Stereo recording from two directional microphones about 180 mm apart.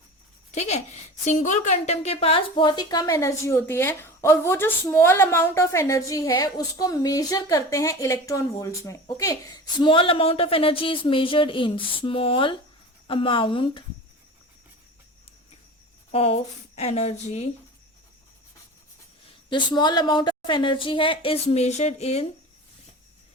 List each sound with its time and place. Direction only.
0.5 s a woman's voice: 40° left (ahead or behind)
16.1 s speech: 35° left (ahead or behind)
19.5 s a woman's voice: 25° left (ahead or behind)